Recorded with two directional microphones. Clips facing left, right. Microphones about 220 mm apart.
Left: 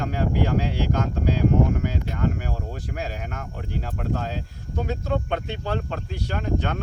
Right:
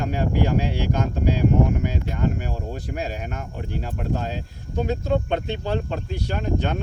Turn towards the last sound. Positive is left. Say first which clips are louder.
# right 2 dB
turn(degrees=-20)  # may be behind; listen again after turning